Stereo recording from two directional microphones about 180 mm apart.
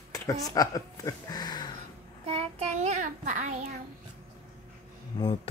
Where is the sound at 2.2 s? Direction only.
35° right (ahead or behind).